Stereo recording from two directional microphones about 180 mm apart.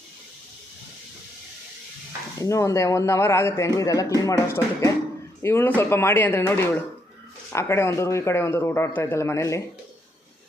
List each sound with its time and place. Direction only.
2.4 s speech: 15° left (ahead or behind)